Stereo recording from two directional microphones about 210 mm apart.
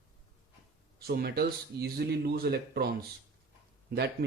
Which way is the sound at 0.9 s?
50° right (ahead or behind).